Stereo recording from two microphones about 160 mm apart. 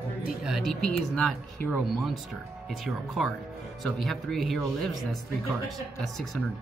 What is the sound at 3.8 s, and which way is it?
Speech, centre (ahead or behind).